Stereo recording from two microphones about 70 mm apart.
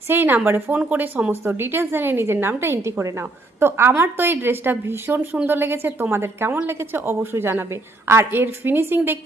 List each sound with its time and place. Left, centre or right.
0.1 s a woman's voice: right